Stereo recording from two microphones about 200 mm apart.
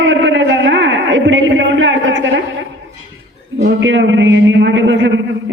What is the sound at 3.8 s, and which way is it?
A man's voice, 70° right (ahead or behind).